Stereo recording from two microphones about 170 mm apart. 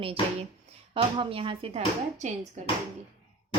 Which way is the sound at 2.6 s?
45° right (ahead or behind).